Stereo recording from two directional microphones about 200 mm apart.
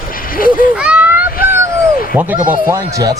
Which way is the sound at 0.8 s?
5° right (ahead or behind).